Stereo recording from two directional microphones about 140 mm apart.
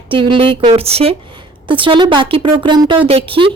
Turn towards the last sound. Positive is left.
turn(degrees=-40)  # may be behind; listen again after turning